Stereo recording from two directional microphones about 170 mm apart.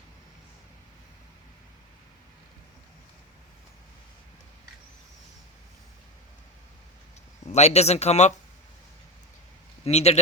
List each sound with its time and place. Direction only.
7.5 s speech: 40° left (ahead or behind)
9.8 s speech: 40° left (ahead or behind)